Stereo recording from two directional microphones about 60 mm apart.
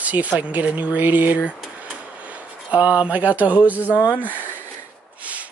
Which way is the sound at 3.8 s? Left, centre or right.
Left.